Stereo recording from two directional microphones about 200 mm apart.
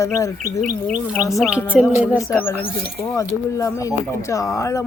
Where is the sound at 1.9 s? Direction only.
10° right (ahead or behind).